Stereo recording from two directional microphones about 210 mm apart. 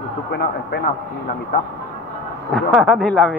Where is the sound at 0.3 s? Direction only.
50° left (ahead or behind).